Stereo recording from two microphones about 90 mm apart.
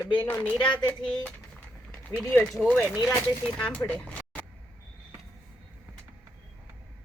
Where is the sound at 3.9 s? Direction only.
15° left (ahead or behind).